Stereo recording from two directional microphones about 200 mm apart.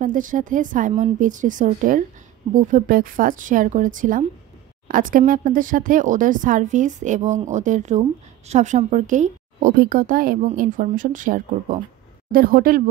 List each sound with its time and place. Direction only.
0.0 s speech: 40° right (ahead or behind)